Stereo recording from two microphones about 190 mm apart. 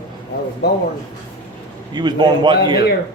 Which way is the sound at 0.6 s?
55° left (ahead or behind).